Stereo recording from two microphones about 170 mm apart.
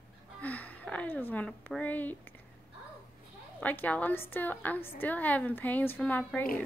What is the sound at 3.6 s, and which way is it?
A woman's voice, 10° left (ahead or behind).